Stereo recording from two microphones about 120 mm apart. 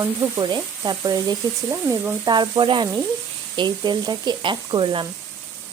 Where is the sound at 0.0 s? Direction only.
30° right (ahead or behind); by 5.0 s 45° right (ahead or behind).